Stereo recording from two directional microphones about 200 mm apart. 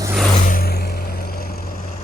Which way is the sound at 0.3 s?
45° left (ahead or behind).